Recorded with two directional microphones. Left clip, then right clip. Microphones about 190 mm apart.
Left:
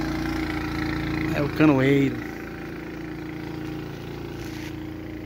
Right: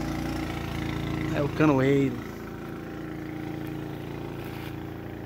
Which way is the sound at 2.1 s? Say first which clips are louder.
Left 4 dB; 55° right (ahead or behind).